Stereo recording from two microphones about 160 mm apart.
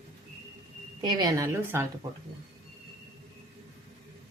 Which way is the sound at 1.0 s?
25° right (ahead or behind).